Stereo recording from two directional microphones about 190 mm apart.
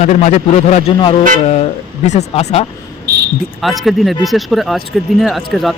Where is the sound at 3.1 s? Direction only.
60° right (ahead or behind).